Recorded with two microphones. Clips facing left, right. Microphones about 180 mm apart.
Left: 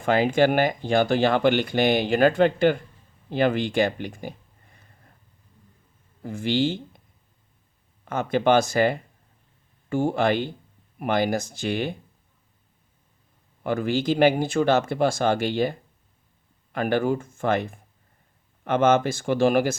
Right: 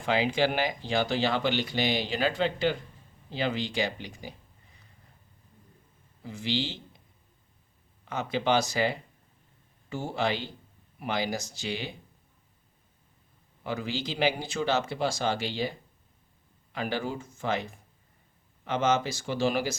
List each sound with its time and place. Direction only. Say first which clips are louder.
0.0 s speech: left 6 dB; 50° left (ahead or behind)
3.2 s a sound: left 8 dB; 55° left (ahead or behind)
6.2 s speech: left 8 dB; 50° left (ahead or behind)
8.0 s speech: left 7 dB; 50° left (ahead or behind)
13.7 s speech: left 9 dB; 55° left (ahead or behind)